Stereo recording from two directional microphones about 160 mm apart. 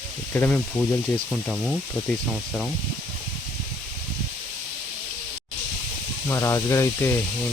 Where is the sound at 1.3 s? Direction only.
Centre (ahead or behind).